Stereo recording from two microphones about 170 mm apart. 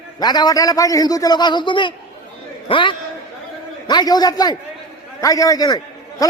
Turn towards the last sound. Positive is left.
turn(degrees=25)  # may be behind; listen again after turning